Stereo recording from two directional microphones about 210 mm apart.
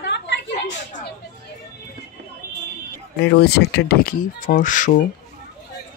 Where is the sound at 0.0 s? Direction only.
55° left (ahead or behind).